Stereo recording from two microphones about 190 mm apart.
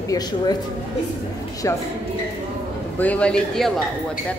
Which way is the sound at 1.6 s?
15° left (ahead or behind).